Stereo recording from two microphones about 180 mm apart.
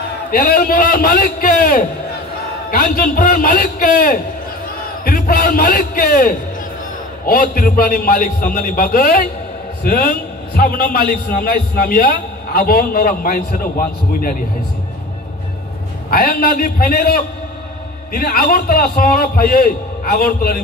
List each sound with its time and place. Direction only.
0.3 s a man's voice: 50° left (ahead or behind)
16.1 s a man's voice: 55° left (ahead or behind)
18.2 s a man's voice: 55° left (ahead or behind)